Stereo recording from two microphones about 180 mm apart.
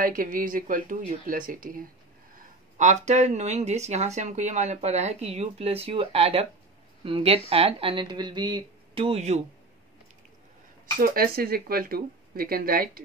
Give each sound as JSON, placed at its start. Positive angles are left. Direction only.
{"t": 0.0, "sound": "speech", "side_deg": -50}
{"t": 11.0, "sound": "speech", "side_deg": -55}